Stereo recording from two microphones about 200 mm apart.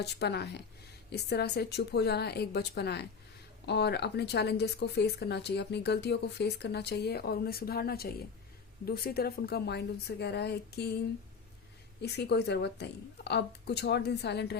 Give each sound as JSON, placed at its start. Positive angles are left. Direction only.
{"t": 0.0, "sound": "a woman's voice", "side_deg": 55}
{"t": 12.0, "sound": "speech", "side_deg": 55}